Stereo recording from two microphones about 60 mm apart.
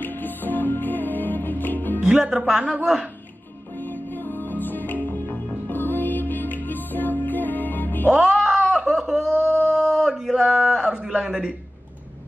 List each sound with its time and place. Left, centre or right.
0.0 s music: left
2.0 s a woman's voice: centre
3.7 s music: left
8.1 s groan: centre
9.7 s a sound: centre